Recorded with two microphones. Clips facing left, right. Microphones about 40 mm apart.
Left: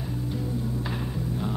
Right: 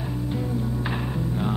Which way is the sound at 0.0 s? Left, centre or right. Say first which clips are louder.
Right 3 dB; right.